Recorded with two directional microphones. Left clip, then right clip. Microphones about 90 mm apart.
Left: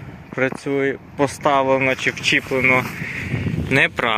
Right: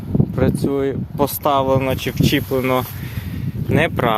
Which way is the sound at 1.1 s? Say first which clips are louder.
Even; 30° right (ahead or behind).